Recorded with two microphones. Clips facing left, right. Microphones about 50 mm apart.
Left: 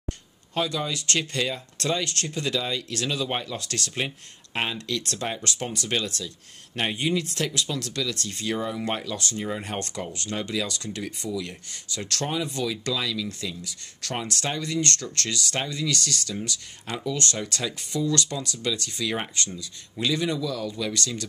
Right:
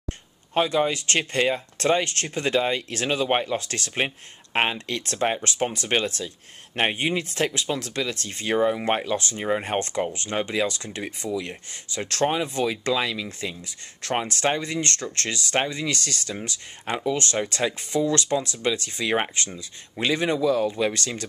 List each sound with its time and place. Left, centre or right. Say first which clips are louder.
0.6 s speech: right 6 dB; right